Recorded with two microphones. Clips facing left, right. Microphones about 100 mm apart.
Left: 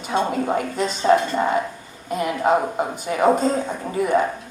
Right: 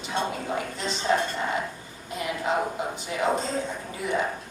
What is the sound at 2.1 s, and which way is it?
Speech, 50° left (ahead or behind).